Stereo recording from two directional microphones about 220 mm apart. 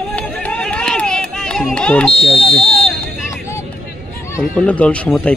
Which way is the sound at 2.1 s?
25° left (ahead or behind).